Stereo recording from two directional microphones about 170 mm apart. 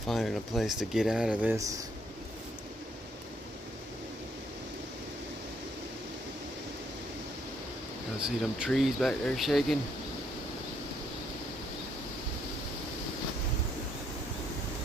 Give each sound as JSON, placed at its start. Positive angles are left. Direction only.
{"t": 0.1, "sound": "speech", "side_deg": 0}
{"t": 8.2, "sound": "speech", "side_deg": -5}